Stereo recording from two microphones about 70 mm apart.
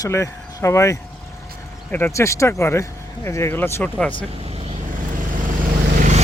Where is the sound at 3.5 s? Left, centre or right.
Left.